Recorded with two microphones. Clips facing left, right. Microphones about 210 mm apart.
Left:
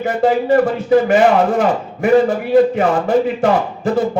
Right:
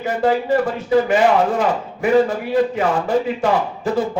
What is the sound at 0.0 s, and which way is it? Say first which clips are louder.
Speech: left 3 dB; 50° left (ahead or behind).